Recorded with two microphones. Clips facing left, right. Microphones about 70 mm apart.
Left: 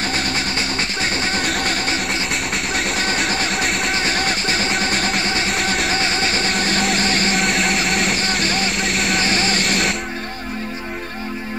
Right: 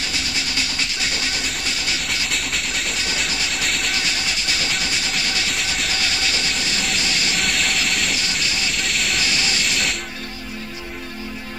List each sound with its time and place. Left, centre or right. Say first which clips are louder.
0.1 s music: left 5 dB; left
3.1 s music: left 5 dB; left
5.5 s vehicle: left 5 dB; left
9.2 s vehicle: left 4 dB; left